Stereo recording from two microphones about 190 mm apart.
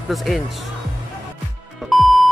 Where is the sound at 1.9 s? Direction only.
Centre (ahead or behind).